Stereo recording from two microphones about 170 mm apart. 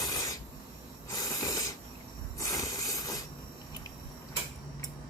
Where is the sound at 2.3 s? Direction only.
20° left (ahead or behind).